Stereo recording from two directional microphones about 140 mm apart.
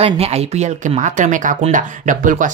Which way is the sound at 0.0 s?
50° right (ahead or behind).